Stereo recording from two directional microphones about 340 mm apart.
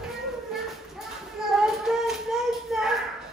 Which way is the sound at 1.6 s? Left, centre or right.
Centre.